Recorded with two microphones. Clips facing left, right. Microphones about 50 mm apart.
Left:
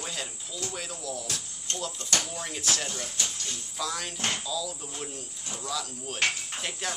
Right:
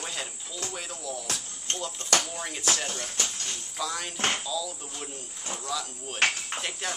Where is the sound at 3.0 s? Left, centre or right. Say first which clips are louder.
Right 1 dB; right.